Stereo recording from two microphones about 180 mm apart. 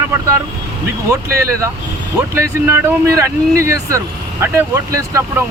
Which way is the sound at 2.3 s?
15° right (ahead or behind).